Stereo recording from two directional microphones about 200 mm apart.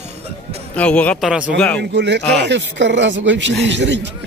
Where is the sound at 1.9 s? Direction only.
60° right (ahead or behind).